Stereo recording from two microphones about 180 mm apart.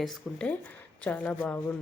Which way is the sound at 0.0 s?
5° left (ahead or behind).